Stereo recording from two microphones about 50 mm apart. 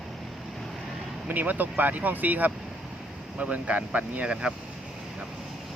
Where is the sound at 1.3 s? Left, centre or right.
Right.